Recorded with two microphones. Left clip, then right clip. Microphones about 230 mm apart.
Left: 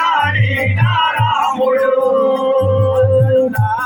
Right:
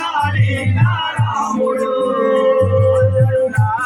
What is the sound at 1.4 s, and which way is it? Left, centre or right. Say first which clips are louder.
Music: left 2 dB; right.